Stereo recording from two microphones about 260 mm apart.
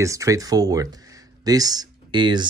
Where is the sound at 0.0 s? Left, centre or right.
Centre.